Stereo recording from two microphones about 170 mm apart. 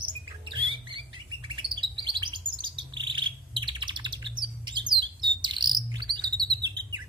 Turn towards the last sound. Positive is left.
turn(degrees=-25)  # may be behind; listen again after turning